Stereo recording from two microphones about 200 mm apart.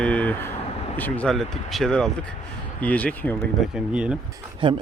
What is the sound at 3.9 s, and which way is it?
Speech, 5° right (ahead or behind).